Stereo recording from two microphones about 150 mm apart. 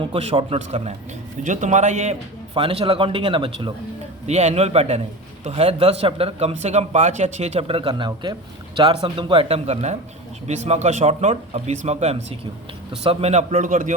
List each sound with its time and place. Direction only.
0.0 s speech: 40° right (ahead or behind)
1.5 s speech: 55° right (ahead or behind)
2.6 s a man's voice: 40° right (ahead or behind)
4.3 s a man's voice: 45° right (ahead or behind)